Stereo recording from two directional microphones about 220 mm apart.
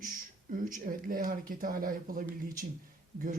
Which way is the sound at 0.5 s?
40° right (ahead or behind).